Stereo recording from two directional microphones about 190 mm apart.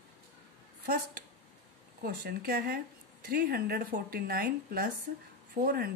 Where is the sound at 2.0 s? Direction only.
50° right (ahead or behind).